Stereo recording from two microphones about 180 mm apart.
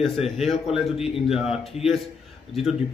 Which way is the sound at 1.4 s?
35° left (ahead or behind).